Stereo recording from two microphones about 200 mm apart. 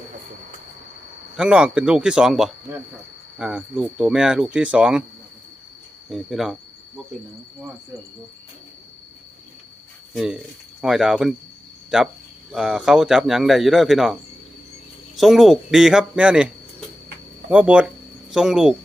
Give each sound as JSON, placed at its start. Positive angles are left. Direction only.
{"t": 1.4, "sound": "speech", "side_deg": -5}
{"t": 6.1, "sound": "speech", "side_deg": 0}
{"t": 10.2, "sound": "speech", "side_deg": 0}
{"t": 17.5, "sound": "speech", "side_deg": -5}